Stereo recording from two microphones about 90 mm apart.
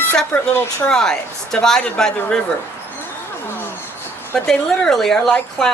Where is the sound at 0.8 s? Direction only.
5° left (ahead or behind).